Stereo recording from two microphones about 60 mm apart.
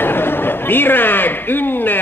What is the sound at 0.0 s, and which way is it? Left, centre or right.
A man's voice, left.